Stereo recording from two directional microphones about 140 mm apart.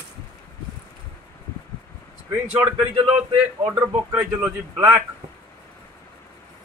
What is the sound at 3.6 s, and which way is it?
A man's voice, 15° right (ahead or behind).